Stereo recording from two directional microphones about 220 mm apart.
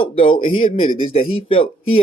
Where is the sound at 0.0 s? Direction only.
25° left (ahead or behind).